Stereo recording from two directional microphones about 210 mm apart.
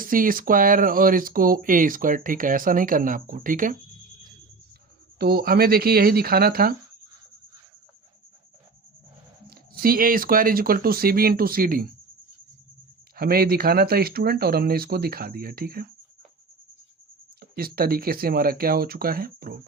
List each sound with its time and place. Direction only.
0.0 s speech: 40° right (ahead or behind)
5.2 s speech: 45° right (ahead or behind)
9.8 s speech: 45° right (ahead or behind)
13.1 s speech: 45° right (ahead or behind)
17.4 s speech: 45° right (ahead or behind)